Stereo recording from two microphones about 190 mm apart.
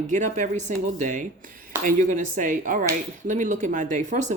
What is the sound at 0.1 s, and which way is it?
A woman's voice, 40° right (ahead or behind).